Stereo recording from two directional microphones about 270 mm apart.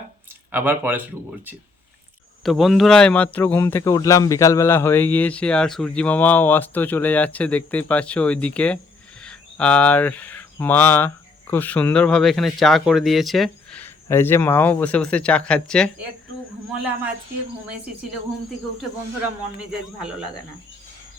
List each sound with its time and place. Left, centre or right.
0.5 s speech: centre
2.4 s speech: centre
19.5 s speech: centre